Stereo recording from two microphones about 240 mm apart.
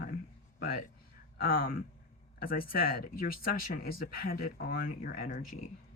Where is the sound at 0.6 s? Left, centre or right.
Left.